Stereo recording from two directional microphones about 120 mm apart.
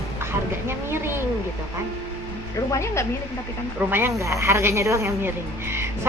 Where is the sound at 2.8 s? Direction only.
25° left (ahead or behind).